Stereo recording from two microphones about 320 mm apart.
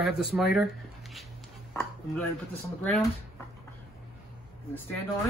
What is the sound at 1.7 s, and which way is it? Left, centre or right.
Speech, centre.